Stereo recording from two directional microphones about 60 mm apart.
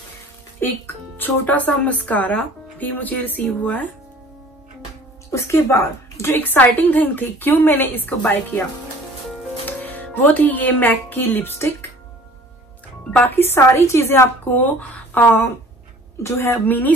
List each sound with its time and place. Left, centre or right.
0.6 s speech: left
5.3 s speech: left
6.3 s a woman's voice: left
9.7 s speech: left
13.3 s a woman's voice: left
13.6 s a woman's voice: left
14.0 s a woman's voice: left